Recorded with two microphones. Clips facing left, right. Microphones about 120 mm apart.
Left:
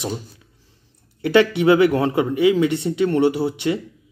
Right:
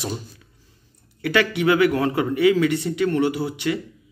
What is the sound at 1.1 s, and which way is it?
Speech, 25° left (ahead or behind).